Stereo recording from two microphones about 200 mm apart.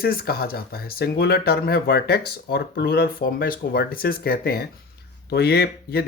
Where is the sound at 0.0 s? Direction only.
50° left (ahead or behind).